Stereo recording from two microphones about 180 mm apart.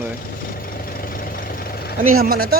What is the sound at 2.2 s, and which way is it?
Speech, 60° right (ahead or behind).